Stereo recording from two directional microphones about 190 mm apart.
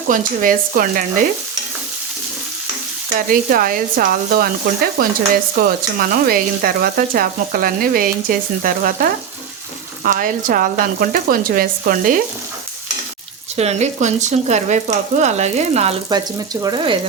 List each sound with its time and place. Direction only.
0.1 s speech: 45° right (ahead or behind)
3.2 s speech: 50° right (ahead or behind)
13.6 s speech: 35° right (ahead or behind)